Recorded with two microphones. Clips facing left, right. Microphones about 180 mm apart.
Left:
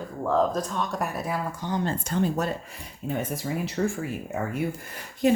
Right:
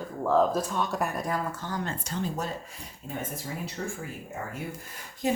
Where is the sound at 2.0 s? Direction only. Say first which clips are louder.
Left 6 dB; 55° left (ahead or behind).